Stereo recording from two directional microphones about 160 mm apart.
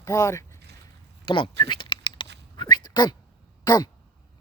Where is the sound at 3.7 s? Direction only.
25° left (ahead or behind).